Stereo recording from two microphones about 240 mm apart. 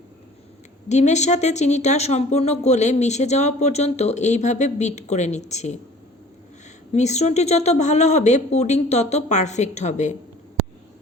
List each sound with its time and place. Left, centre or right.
0.9 s speech: left
6.9 s speech: left